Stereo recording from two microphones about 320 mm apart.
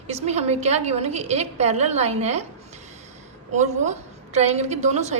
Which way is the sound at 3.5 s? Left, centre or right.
Right.